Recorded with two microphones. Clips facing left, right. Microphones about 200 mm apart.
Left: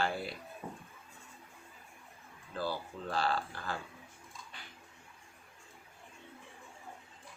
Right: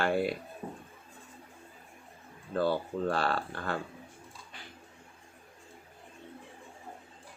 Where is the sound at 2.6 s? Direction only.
60° right (ahead or behind).